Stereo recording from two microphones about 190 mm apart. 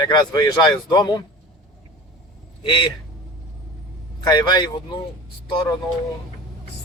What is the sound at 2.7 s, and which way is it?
Speech, 25° left (ahead or behind).